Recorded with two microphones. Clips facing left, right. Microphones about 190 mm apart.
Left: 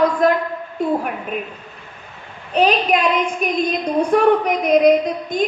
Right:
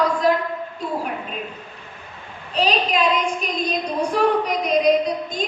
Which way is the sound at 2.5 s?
55° left (ahead or behind).